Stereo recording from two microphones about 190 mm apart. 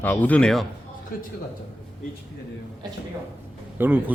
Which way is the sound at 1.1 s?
50° left (ahead or behind).